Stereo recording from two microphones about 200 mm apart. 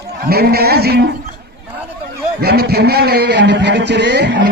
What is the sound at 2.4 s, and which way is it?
Speech, 55° right (ahead or behind).